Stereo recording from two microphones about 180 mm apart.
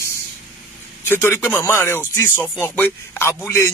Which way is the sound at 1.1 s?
15° left (ahead or behind).